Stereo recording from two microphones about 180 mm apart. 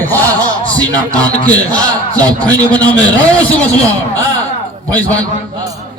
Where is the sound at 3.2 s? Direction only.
5° left (ahead or behind).